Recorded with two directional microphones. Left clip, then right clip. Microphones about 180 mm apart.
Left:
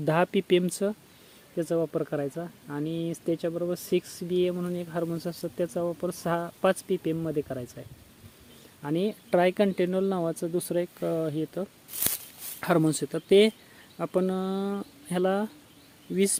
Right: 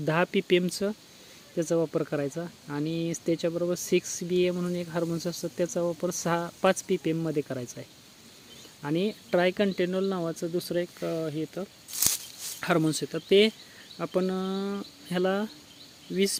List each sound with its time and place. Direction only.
0.0 s speech: centre (ahead or behind)
1.5 s speech: 15° right (ahead or behind)
8.8 s speech: 5° right (ahead or behind)
16.1 s speech: 15° left (ahead or behind)